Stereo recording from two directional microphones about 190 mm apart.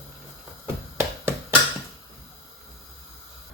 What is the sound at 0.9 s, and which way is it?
Music, 15° right (ahead or behind).